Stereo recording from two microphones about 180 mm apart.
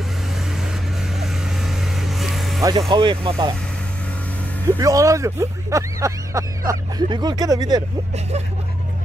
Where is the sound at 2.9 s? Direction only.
25° right (ahead or behind).